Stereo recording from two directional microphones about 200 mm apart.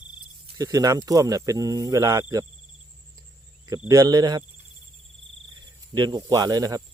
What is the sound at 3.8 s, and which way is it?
Speech, 20° right (ahead or behind).